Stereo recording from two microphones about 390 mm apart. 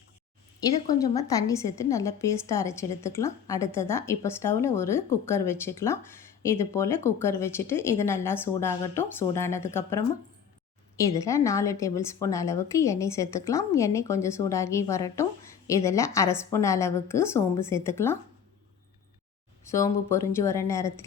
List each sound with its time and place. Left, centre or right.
0.6 s a woman's voice: centre
11.1 s a woman's voice: centre
19.6 s a woman's voice: centre